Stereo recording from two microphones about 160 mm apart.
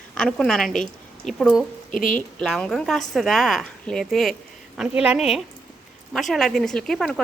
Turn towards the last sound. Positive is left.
turn(degrees=0)  # may be behind; listen again after turning